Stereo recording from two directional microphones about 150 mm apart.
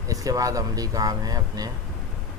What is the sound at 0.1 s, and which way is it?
Speech, 25° right (ahead or behind).